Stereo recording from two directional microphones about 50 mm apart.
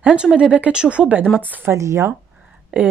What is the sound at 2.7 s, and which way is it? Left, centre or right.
Speech, right.